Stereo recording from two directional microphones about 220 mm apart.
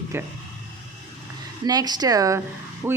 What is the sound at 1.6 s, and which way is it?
Speech, 20° right (ahead or behind).